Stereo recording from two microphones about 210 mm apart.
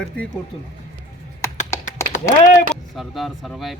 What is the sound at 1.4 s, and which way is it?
Music, 15° left (ahead or behind).